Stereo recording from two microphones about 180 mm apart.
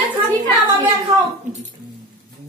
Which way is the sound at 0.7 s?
20° right (ahead or behind).